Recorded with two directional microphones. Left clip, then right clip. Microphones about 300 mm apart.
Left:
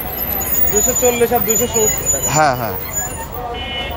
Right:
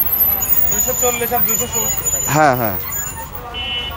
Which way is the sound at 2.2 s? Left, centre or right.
Right.